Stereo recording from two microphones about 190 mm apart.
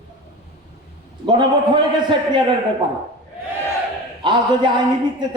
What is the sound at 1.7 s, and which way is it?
Speech, 25° right (ahead or behind).